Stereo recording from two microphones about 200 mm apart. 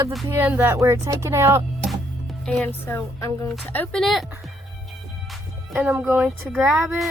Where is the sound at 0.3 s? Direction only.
10° right (ahead or behind).